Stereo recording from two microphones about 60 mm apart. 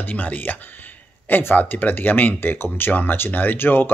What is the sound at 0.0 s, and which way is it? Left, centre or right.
Speech, left.